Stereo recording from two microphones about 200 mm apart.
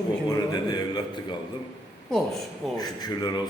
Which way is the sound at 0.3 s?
20° left (ahead or behind).